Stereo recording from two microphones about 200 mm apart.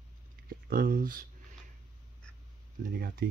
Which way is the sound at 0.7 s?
45° right (ahead or behind).